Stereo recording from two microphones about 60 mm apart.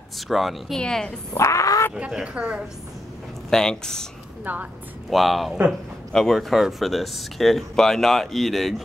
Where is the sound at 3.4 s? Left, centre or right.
Centre.